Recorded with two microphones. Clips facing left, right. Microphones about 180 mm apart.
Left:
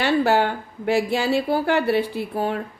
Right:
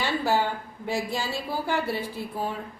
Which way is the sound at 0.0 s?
70° left (ahead or behind).